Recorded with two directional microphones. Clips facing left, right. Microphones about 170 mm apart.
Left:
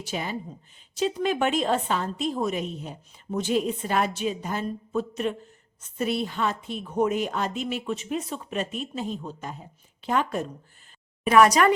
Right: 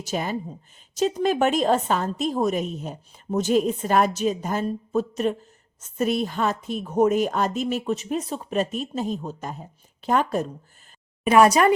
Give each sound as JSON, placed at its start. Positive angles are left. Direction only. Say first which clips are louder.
{"t": 0.0, "sound": "a woman's voice", "louder": "right 4 dB", "side_deg": -45}
{"t": 11.3, "sound": "a woman's voice", "louder": "right 2 dB", "side_deg": -30}